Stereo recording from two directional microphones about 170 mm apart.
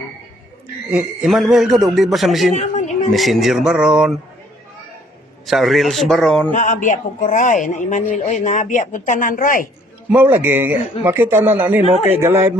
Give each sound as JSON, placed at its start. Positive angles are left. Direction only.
{"t": 0.9, "sound": "a man's voice", "side_deg": -5}
{"t": 2.5, "sound": "a man's voice", "side_deg": 45}
{"t": 3.1, "sound": "a man's voice", "side_deg": 0}
{"t": 5.5, "sound": "a man's voice", "side_deg": 0}
{"t": 6.5, "sound": "a man's voice", "side_deg": 50}
{"t": 10.1, "sound": "speech", "side_deg": -10}